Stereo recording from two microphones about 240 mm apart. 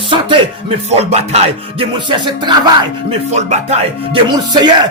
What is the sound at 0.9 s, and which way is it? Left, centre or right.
Music, right.